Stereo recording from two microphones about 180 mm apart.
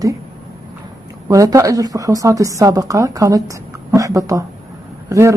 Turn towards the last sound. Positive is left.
turn(degrees=-15)  # may be behind; listen again after turning